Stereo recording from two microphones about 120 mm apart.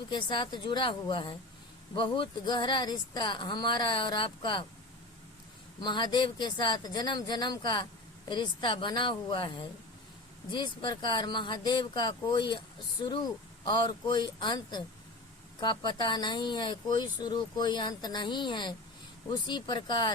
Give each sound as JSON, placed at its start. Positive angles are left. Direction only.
{"t": 0.1, "sound": "speech", "side_deg": 40}
{"t": 5.8, "sound": "speech", "side_deg": 40}
{"t": 10.5, "sound": "speech", "side_deg": 40}